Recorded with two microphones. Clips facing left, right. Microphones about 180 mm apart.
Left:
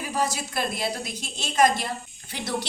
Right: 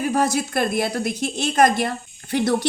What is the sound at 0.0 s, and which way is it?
A woman's voice, 55° right (ahead or behind).